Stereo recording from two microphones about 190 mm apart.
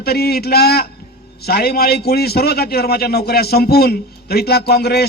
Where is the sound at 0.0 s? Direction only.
55° left (ahead or behind).